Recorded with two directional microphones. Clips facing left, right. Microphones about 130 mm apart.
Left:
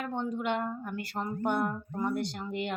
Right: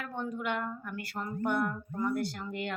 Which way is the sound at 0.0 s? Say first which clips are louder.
Left 3 dB; 25° left (ahead or behind).